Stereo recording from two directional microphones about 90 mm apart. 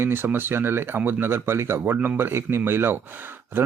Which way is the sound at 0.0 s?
25° right (ahead or behind).